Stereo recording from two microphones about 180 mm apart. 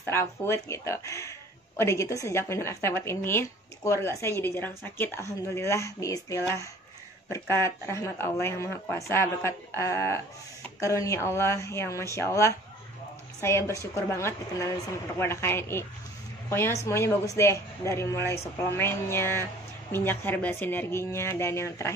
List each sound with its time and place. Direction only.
0.0 s speech: 15° left (ahead or behind)